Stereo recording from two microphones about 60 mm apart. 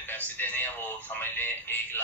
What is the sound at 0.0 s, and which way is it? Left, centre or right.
Speech, left.